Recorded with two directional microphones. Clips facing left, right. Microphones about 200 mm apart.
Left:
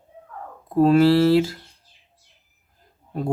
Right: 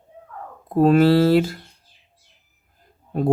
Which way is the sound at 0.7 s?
50° right (ahead or behind).